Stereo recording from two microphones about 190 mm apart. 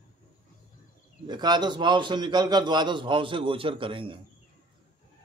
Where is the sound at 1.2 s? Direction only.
25° right (ahead or behind).